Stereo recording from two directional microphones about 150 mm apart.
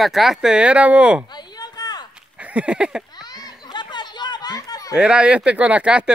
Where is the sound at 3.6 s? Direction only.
30° left (ahead or behind).